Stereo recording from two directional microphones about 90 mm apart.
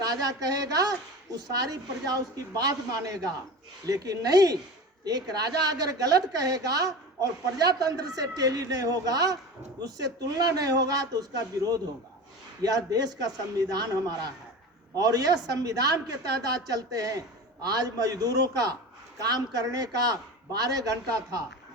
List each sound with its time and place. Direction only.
0.0 s a woman's voice: 45° right (ahead or behind)
14.9 s a woman's voice: 45° right (ahead or behind)